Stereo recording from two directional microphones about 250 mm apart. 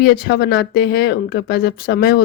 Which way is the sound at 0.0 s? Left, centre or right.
Left.